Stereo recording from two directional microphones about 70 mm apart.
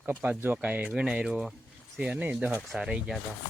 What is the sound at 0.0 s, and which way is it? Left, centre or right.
Speech, right.